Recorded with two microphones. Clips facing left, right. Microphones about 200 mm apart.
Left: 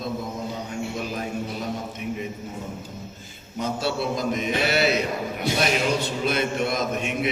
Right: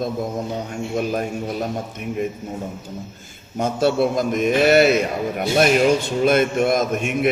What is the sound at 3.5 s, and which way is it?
A man's voice, 50° right (ahead or behind).